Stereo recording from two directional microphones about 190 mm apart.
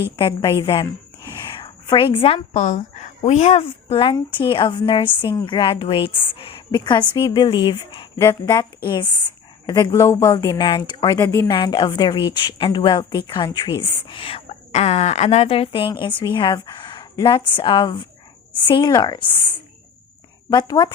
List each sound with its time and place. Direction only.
0.2 s a woman's voice: 20° left (ahead or behind)
20.5 s a woman's voice: 20° left (ahead or behind)